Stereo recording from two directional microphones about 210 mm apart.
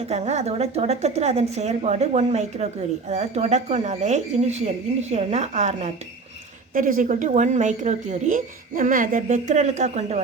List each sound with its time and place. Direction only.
0.1 s speech: 30° right (ahead or behind)